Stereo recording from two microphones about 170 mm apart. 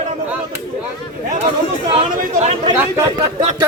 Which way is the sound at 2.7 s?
15° right (ahead or behind).